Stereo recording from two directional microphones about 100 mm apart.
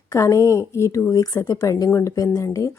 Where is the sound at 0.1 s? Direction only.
30° left (ahead or behind).